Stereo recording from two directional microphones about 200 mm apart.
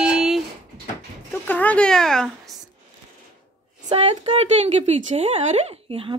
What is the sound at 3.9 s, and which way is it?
A woman's voice, 30° right (ahead or behind).